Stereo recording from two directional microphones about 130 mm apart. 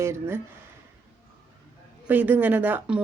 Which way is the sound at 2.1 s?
15° right (ahead or behind).